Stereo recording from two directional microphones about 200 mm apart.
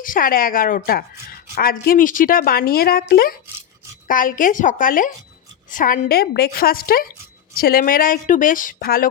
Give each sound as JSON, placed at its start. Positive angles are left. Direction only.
{"t": 0.0, "sound": "a woman's voice", "side_deg": 45}